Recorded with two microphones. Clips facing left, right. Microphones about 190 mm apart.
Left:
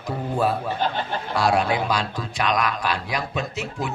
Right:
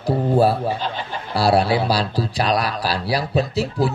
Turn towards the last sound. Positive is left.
turn(degrees=-35)  # may be behind; listen again after turning